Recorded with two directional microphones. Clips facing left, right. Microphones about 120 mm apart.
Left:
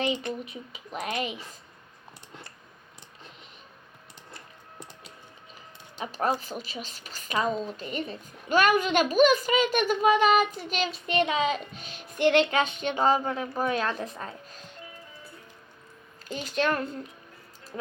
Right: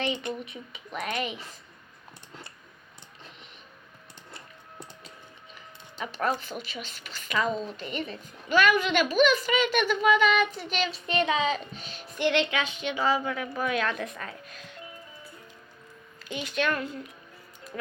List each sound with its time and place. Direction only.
0.9 s a woman's voice: 35° left (ahead or behind)
6.1 s a woman's voice: 40° left (ahead or behind)
7.5 s a woman's voice: centre (ahead or behind)
7.8 s a woman's voice: 40° left (ahead or behind)
11.1 s music: 40° left (ahead or behind)
12.7 s a woman's voice: 45° left (ahead or behind)
16.3 s a woman's voice: 35° left (ahead or behind)